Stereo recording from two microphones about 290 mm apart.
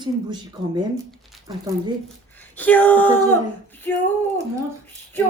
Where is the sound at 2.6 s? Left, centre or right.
Centre.